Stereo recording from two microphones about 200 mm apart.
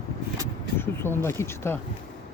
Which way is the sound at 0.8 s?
10° left (ahead or behind).